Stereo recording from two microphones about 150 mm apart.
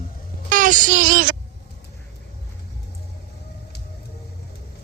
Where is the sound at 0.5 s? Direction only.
60° right (ahead or behind).